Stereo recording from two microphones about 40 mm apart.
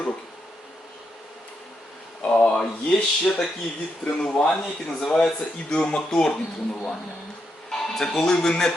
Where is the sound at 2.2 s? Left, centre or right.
Left.